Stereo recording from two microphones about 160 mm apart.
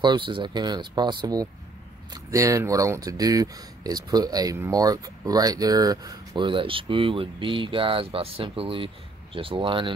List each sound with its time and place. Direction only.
0.0 s speech: 30° right (ahead or behind)